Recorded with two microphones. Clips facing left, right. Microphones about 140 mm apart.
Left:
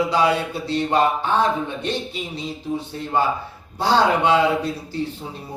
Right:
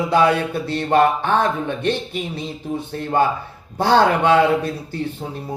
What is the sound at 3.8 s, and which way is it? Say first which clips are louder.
Speech: right 2 dB; 55° right (ahead or behind).